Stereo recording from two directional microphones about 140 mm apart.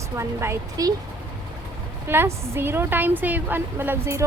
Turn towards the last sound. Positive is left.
turn(degrees=-15)  # may be behind; listen again after turning